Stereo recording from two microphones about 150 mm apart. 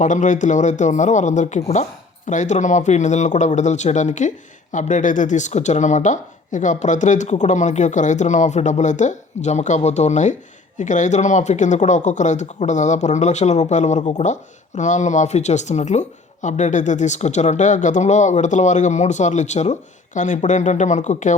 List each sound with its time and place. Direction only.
0.0 s speech: 55° left (ahead or behind)